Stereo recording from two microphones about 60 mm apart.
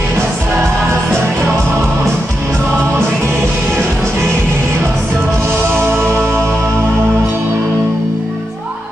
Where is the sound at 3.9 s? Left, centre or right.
Right.